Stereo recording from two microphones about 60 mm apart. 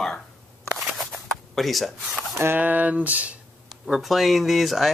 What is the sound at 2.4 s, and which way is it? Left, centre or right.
Speech, right.